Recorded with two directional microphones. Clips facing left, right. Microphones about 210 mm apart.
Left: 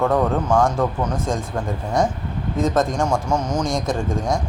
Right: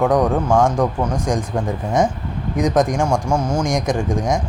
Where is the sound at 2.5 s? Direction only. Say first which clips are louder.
Right 3 dB; 15° right (ahead or behind).